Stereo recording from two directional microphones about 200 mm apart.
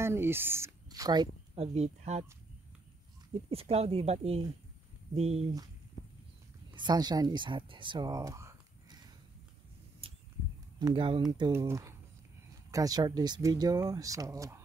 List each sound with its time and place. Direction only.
0.0 s speech: 10° right (ahead or behind); by 2.2 s 35° right (ahead or behind)
3.4 s speech: 30° right (ahead or behind)
6.7 s speech: 20° right (ahead or behind)
10.8 s speech: 25° right (ahead or behind)